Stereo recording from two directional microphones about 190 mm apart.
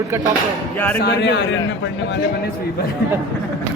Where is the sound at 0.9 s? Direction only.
60° left (ahead or behind).